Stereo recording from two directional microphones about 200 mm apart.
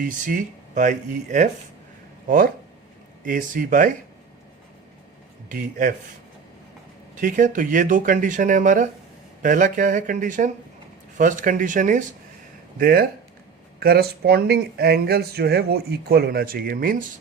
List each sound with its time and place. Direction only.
0.0 s speech: 40° right (ahead or behind)
5.5 s speech: 45° right (ahead or behind)
7.2 s speech: 40° right (ahead or behind)